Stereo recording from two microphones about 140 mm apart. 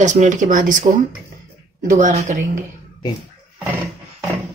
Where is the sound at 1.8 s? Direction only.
65° right (ahead or behind).